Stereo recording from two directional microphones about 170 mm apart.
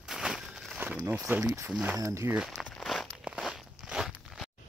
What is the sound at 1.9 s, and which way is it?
Walk, 20° right (ahead or behind).